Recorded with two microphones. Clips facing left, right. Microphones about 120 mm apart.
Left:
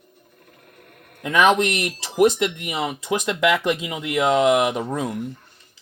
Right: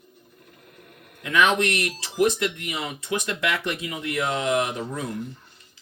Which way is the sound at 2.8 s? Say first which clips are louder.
Left 6 dB; 90° left.